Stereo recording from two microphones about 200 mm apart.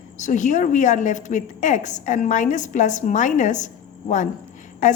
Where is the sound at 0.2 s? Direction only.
40° left (ahead or behind).